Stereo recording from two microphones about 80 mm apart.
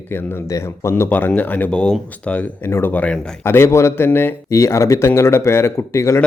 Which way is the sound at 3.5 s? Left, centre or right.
Left.